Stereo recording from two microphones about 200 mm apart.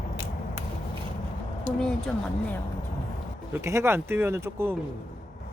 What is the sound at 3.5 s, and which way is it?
Speech, 15° right (ahead or behind).